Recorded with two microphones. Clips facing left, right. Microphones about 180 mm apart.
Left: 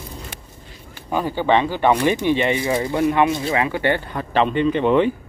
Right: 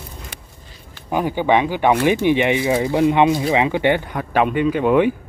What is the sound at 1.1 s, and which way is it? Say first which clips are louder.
Speech: right 1 dB; 15° right (ahead or behind).